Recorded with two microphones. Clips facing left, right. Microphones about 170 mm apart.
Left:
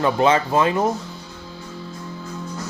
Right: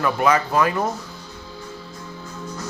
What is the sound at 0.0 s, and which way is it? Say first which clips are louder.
Speech: left 2 dB; 25° left (ahead or behind).